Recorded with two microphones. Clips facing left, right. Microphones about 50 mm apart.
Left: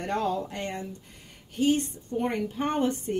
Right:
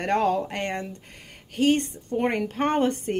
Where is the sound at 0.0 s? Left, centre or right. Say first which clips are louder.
Right 5 dB; right.